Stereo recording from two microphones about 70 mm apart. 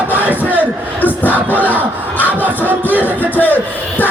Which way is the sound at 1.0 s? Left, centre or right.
Left.